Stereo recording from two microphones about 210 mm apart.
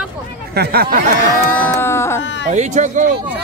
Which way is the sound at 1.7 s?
10° left (ahead or behind).